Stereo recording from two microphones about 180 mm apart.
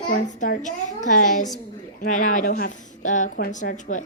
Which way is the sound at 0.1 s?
45° left (ahead or behind).